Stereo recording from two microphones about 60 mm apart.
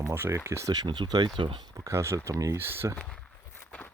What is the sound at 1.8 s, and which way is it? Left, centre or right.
Speech, right.